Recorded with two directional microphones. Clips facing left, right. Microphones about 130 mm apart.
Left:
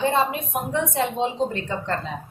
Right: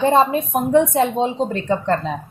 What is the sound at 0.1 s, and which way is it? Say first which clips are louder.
Speech: right 7 dB; 40° right (ahead or behind).